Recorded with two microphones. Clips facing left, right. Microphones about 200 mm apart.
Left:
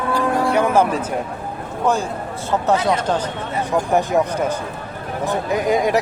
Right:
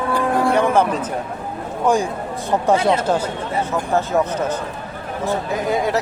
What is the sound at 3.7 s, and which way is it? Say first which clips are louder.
Speech: left 3 dB; 15° left (ahead or behind).